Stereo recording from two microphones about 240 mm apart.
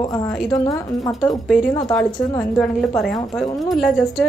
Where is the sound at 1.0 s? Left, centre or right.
Centre.